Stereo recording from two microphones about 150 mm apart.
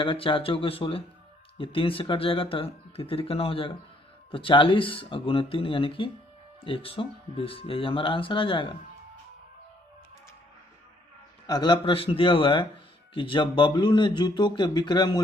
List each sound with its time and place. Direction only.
0.0 s speech: 35° left (ahead or behind)
11.4 s speech: 30° left (ahead or behind)